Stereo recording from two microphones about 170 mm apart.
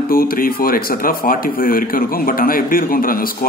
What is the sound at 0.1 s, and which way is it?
Speech, 60° left (ahead or behind).